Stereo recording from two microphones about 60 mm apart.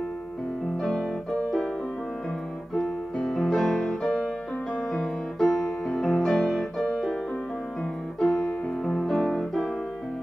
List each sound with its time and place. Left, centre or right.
0.7 s piano: centre
2.7 s music: centre
4.9 s piano: centre
8.2 s music: centre